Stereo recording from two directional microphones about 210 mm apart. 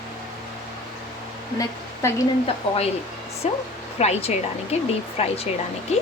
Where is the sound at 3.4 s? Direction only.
30° left (ahead or behind).